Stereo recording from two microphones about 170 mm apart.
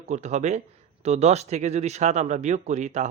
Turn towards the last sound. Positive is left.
turn(degrees=-45)  # may be behind; listen again after turning